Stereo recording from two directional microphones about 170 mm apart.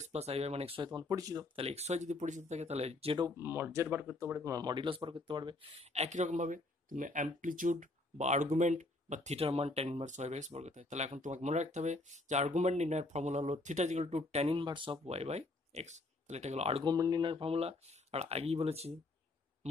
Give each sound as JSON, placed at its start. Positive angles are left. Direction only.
{"t": 0.0, "sound": "speech", "side_deg": -40}
{"t": 1.5, "sound": "speech", "side_deg": -35}
{"t": 3.3, "sound": "speech", "side_deg": -15}
{"t": 4.6, "sound": "speech", "side_deg": -25}
{"t": 16.8, "sound": "speech", "side_deg": -20}